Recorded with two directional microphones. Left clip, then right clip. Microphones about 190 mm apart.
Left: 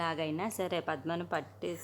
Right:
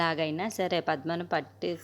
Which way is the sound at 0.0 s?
25° right (ahead or behind).